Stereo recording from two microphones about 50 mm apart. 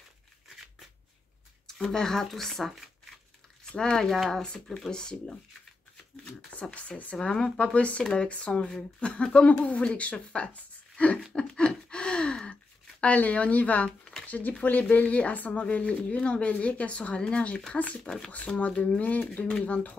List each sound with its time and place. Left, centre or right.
1.7 s speech: centre
3.7 s speech: centre
4.0 s speech: centre
4.4 s speech: centre
6.7 s speech: left
7.2 s a woman's voice: centre
11.3 s a sound: centre
13.0 s speech: left
18.0 s speech: centre
18.9 s speech: left